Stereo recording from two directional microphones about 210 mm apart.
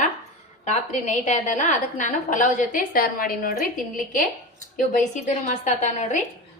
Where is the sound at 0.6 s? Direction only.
30° left (ahead or behind).